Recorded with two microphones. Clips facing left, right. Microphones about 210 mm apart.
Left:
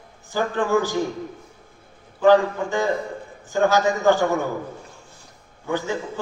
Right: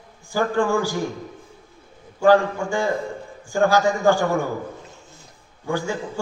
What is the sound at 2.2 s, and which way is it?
A man's voice, 10° right (ahead or behind).